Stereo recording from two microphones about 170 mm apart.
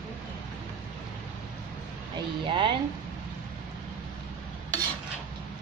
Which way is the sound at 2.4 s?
30° right (ahead or behind).